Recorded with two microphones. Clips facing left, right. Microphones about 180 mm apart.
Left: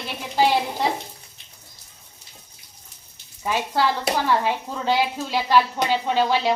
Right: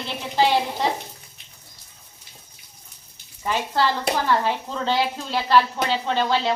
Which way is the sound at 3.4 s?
10° left (ahead or behind).